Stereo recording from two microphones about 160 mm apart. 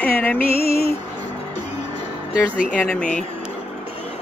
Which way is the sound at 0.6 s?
75° left (ahead or behind).